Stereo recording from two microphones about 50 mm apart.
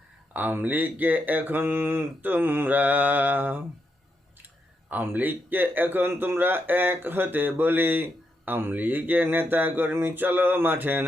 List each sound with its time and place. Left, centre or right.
0.3 s speech: right
4.9 s a man's voice: right